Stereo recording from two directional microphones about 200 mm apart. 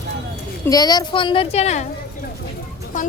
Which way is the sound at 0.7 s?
20° left (ahead or behind).